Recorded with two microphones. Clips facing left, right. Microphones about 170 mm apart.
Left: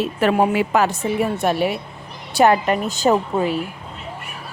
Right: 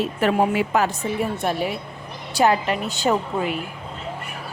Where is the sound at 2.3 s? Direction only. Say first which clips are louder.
Left 4 dB; 55° left (ahead or behind).